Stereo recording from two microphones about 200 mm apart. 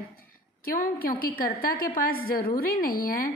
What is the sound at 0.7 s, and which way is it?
A woman's voice, 45° left (ahead or behind).